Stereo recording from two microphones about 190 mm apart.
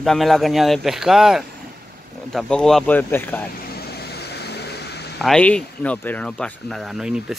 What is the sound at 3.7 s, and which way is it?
Vehicle, 55° left (ahead or behind).